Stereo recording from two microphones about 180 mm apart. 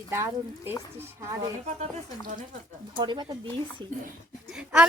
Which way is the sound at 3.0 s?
25° right (ahead or behind).